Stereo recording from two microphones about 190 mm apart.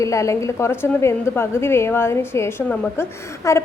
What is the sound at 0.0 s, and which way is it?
A woman's voice, 15° left (ahead or behind).